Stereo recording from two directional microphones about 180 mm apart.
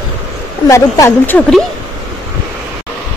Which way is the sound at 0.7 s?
15° left (ahead or behind).